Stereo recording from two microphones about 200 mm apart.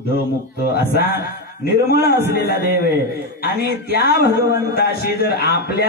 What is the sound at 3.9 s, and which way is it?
A man's voice, 50° left (ahead or behind).